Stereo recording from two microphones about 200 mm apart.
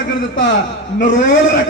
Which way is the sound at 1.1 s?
65° left (ahead or behind).